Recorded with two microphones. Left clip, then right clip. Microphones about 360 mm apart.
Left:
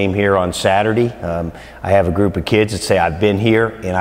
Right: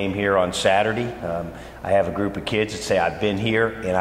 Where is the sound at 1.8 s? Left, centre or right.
Left.